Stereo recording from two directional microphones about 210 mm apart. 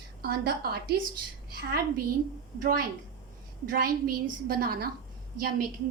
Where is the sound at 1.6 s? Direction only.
45° right (ahead or behind).